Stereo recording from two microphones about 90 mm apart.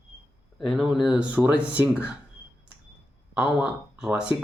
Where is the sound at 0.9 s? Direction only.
10° right (ahead or behind).